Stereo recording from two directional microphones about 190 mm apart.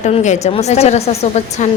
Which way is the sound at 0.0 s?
40° left (ahead or behind).